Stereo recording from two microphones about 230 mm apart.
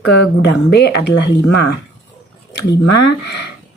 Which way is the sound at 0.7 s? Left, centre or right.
Left.